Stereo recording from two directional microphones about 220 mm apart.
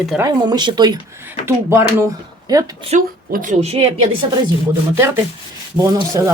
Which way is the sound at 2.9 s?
35° right (ahead or behind).